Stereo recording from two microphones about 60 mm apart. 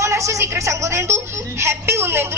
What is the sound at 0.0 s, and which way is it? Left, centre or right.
A man's voice, right.